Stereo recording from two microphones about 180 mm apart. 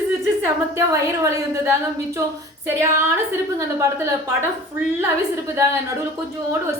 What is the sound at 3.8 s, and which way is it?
Speech, 15° right (ahead or behind).